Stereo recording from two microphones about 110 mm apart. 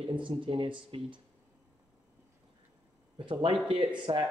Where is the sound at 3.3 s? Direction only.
50° right (ahead or behind).